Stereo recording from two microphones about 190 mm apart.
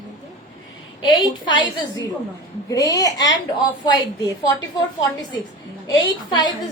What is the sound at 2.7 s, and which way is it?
Speech, 20° left (ahead or behind).